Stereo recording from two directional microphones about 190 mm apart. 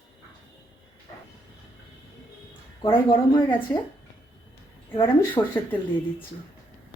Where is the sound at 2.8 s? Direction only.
25° left (ahead or behind).